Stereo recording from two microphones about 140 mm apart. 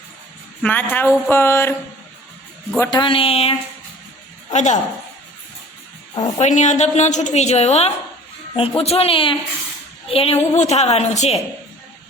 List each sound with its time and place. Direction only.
0.6 s a woman's voice: 10° left (ahead or behind)
2.9 s speech: 35° left (ahead or behind)
4.5 s a woman's voice: 55° left (ahead or behind)
6.1 s a woman's voice: 55° left (ahead or behind)